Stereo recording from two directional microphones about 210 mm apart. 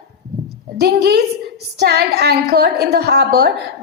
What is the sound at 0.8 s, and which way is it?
A woman's voice, 50° right (ahead or behind).